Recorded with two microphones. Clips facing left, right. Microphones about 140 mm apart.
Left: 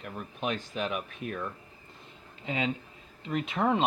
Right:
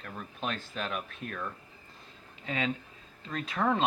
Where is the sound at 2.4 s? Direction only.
25° left (ahead or behind).